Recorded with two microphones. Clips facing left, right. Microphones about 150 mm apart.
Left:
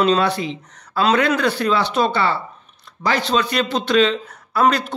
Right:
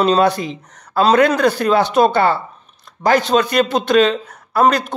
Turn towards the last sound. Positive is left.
turn(degrees=-45)  # may be behind; listen again after turning